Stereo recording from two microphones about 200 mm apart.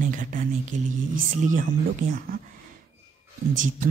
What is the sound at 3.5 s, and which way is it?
Speech, 40° right (ahead or behind).